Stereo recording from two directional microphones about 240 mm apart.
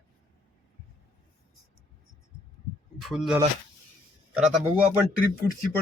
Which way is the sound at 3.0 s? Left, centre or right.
Centre.